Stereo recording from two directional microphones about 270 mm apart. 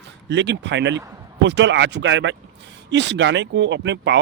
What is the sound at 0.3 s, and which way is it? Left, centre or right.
Speech, right.